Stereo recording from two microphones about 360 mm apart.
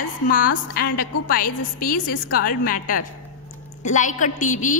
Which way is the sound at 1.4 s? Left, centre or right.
Left.